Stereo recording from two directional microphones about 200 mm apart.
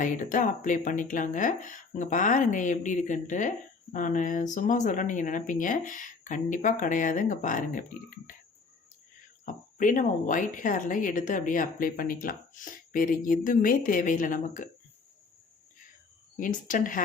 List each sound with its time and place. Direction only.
0.0 s speech: 40° left (ahead or behind)
9.5 s speech: 40° left (ahead or behind)
16.4 s speech: 40° left (ahead or behind)